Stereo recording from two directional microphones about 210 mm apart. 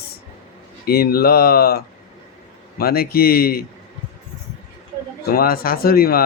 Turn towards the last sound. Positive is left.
turn(degrees=45)  # may be behind; listen again after turning